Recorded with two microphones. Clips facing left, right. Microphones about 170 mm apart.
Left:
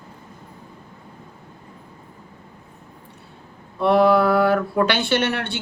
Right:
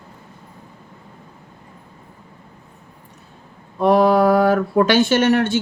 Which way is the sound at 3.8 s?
45° right (ahead or behind).